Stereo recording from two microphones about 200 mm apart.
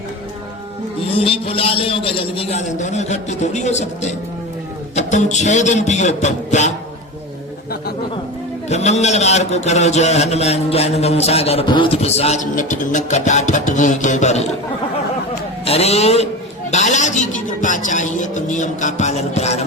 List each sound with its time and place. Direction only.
1.1 s a man's voice: 25° left (ahead or behind)
8.7 s a man's voice: 35° left (ahead or behind)
15.6 s a man's voice: 30° left (ahead or behind)